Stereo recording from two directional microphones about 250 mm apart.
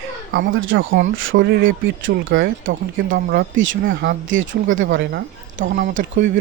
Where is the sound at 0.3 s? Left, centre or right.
Right.